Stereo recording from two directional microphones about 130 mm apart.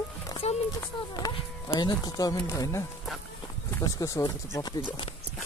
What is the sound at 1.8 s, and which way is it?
Speech, 30° left (ahead or behind).